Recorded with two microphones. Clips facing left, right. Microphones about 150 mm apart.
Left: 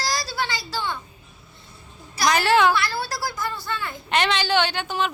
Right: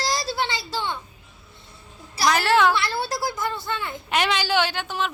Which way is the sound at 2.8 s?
25° right (ahead or behind).